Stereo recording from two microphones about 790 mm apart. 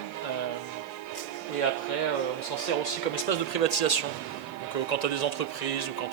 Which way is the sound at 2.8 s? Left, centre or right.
Left.